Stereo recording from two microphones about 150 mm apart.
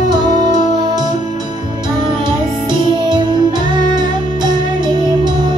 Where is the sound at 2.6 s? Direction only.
30° right (ahead or behind).